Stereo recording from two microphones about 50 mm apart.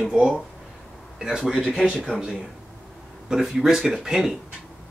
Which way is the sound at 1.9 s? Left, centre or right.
Left.